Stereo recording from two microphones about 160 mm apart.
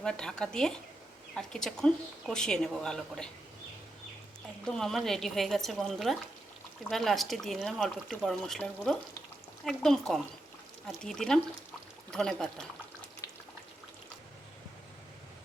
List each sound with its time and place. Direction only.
0.0 s speech: 5° left (ahead or behind)
4.6 s speech: 5° left (ahead or behind)
13.2 s a sound: 25° left (ahead or behind)